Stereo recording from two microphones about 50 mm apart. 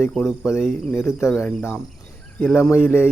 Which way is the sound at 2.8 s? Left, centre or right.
Left.